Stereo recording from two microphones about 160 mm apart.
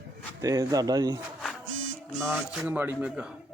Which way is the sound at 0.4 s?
20° right (ahead or behind).